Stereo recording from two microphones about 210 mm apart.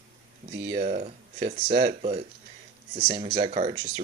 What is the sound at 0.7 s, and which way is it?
Speech, 35° right (ahead or behind).